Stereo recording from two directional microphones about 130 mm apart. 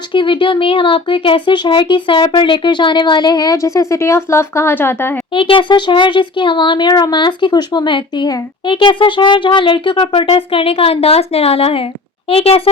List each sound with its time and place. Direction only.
0.1 s speech: 40° left (ahead or behind); by 5.1 s 15° left (ahead or behind)
5.3 s speech: 40° left (ahead or behind)